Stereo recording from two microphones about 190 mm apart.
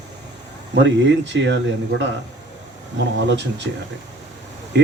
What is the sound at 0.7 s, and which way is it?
Speech, 65° right (ahead or behind).